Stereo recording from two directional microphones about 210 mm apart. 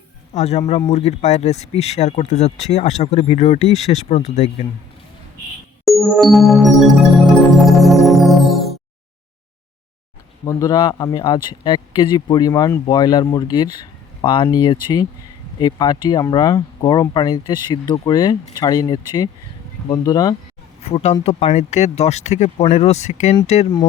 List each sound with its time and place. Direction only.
0.3 s speech: 30° left (ahead or behind)
5.8 s keyboard: centre (ahead or behind)
10.4 s speech: 15° left (ahead or behind)
20.8 s speech: 30° left (ahead or behind)